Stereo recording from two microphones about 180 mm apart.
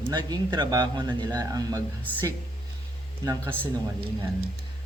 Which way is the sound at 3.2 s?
15° right (ahead or behind).